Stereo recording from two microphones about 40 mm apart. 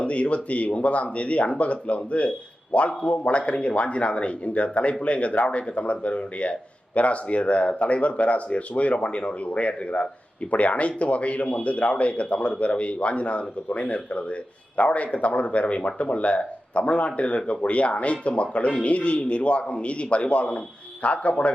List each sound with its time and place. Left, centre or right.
0.0 s speech: left